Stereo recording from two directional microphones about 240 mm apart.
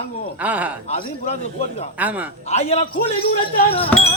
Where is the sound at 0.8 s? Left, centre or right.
Left.